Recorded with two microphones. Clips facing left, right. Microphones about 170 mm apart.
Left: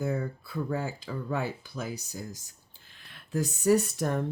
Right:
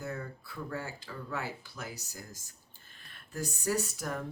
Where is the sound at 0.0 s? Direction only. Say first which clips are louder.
Left 8 dB; 55° left (ahead or behind).